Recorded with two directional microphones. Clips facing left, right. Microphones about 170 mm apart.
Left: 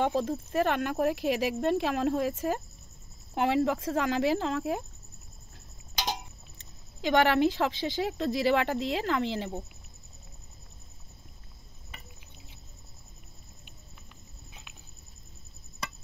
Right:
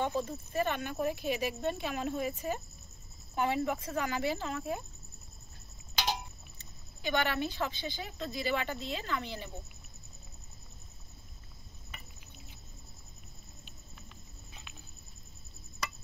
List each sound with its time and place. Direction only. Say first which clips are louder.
0.0 s speech: left 5 dB; 85° left
7.0 s speech: left 9 dB; 90° left